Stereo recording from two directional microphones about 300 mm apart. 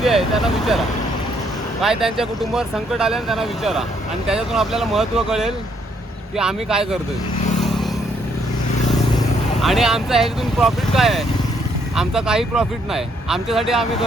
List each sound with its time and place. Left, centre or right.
0.0 s speech: centre
7.6 s a sound: centre
9.6 s speech: centre